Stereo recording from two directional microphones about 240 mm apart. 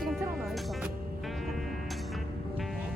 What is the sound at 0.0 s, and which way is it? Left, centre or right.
Music, centre.